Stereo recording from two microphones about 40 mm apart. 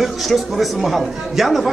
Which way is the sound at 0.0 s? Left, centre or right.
Centre.